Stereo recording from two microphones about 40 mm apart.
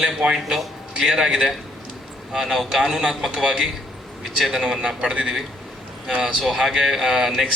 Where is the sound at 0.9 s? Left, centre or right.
Centre.